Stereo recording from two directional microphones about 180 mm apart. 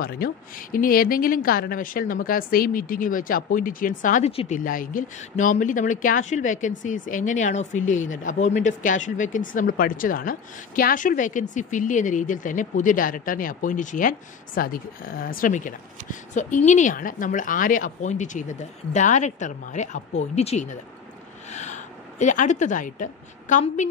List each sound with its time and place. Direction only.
0.0 s speech: 50° left (ahead or behind)
4.3 s a woman's voice: 30° left (ahead or behind)
4.6 s a woman's voice: 50° left (ahead or behind)